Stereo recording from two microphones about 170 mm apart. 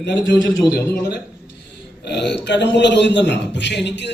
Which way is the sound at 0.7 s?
75° left (ahead or behind).